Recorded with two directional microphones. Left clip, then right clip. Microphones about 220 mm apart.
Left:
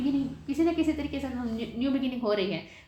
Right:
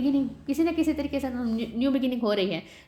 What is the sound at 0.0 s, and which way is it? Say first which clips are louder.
A woman's voice: right 3 dB; 45° right (ahead or behind).